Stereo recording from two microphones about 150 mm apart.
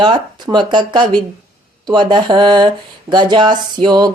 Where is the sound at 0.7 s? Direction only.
30° right (ahead or behind).